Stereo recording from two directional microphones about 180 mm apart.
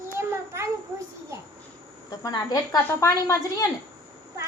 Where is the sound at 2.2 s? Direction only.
20° left (ahead or behind).